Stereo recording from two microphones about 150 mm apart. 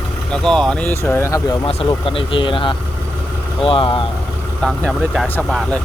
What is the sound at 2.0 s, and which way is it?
Speech, 35° left (ahead or behind).